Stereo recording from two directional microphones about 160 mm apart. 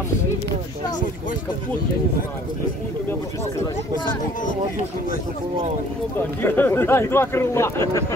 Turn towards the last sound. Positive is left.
turn(degrees=15)  # may be behind; listen again after turning